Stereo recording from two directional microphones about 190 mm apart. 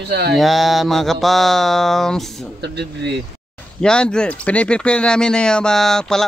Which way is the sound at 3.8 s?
5° left (ahead or behind).